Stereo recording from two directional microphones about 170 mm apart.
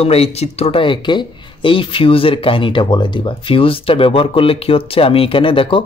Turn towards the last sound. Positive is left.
turn(degrees=30)  # may be behind; listen again after turning